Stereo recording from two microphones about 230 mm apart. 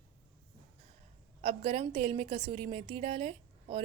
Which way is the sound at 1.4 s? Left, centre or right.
Right.